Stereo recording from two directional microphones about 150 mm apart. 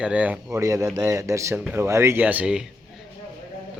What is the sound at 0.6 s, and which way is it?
A man's voice, 20° right (ahead or behind).